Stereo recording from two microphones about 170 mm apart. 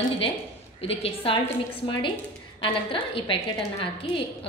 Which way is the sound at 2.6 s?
30° left (ahead or behind).